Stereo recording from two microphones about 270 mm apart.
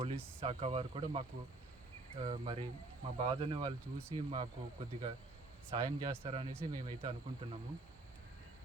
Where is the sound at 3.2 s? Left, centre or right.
Centre.